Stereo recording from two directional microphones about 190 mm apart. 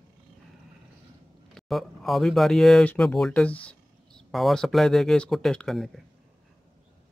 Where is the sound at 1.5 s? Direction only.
Centre (ahead or behind).